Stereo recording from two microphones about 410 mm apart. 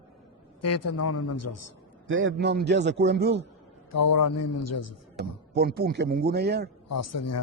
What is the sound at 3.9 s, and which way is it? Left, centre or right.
A man's voice, left.